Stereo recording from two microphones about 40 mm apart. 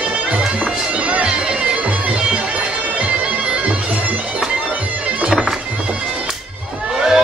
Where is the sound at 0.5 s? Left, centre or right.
Right.